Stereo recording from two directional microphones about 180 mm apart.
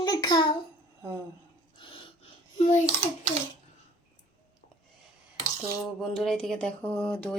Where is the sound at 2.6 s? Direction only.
40° left (ahead or behind).